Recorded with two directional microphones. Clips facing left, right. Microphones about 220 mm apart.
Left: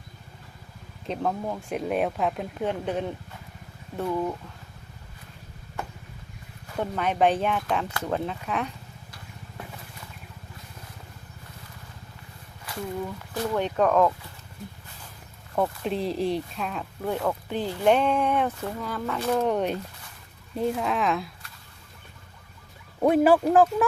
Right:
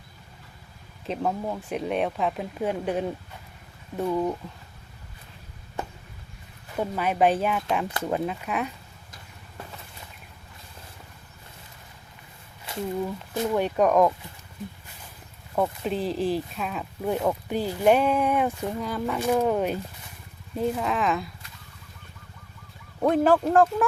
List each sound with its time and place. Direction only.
1.0 s speech: 5° right (ahead or behind)
6.7 s speech: 5° right (ahead or behind)
12.7 s a sound: 25° right (ahead or behind)
13.3 s speech: 15° right (ahead or behind)
15.5 s speech: centre (ahead or behind)
23.0 s speech: 10° left (ahead or behind)